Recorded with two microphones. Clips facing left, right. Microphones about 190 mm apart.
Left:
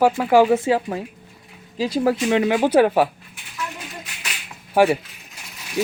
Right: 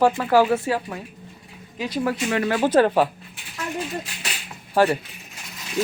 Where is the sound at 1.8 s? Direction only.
30° left (ahead or behind).